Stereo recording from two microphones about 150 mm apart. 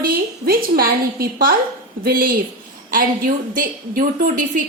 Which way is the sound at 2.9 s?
65° right (ahead or behind).